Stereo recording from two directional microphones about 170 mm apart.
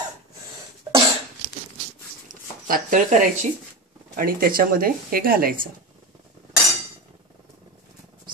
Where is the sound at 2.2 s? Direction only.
50° right (ahead or behind).